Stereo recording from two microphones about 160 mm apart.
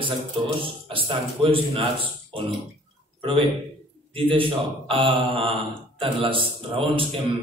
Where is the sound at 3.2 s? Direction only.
35° right (ahead or behind).